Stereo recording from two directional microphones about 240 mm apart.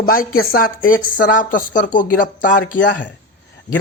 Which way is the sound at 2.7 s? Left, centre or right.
Left.